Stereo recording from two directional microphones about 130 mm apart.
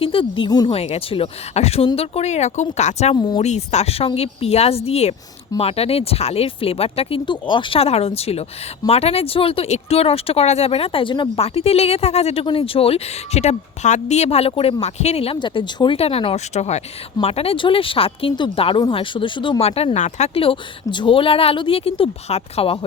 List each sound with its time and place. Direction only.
0.0 s speech: 45° left (ahead or behind)
0.7 s speech: 50° left (ahead or behind)
3.2 s speech: 30° left (ahead or behind)
3.4 s speech: 60° left (ahead or behind); by 11.4 s 40° left (ahead or behind)
11.4 s speech: 50° left (ahead or behind)
16.0 s speech: 50° left (ahead or behind)